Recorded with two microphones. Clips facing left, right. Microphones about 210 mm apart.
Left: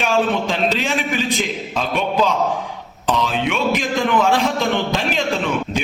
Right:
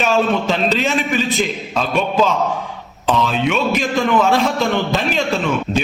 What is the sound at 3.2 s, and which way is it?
A man's voice, 15° left (ahead or behind).